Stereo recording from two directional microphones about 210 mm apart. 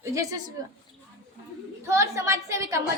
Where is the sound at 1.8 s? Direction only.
15° right (ahead or behind).